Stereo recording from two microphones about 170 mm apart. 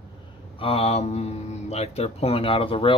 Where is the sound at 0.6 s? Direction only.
35° left (ahead or behind).